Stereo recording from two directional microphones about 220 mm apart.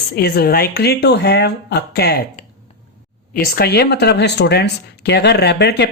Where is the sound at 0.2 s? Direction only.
45° left (ahead or behind).